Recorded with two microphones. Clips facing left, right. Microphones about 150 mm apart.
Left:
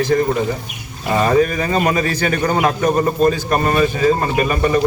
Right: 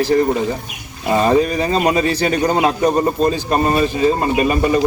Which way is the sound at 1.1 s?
25° right (ahead or behind).